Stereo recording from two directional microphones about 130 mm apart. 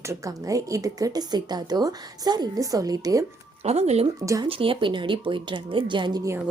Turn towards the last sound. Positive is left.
turn(degrees=-30)  # may be behind; listen again after turning